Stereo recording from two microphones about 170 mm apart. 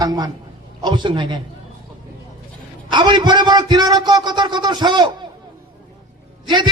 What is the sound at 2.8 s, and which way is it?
A man's voice, 25° right (ahead or behind).